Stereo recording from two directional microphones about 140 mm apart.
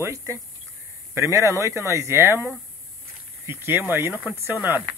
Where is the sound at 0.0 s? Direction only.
20° right (ahead or behind).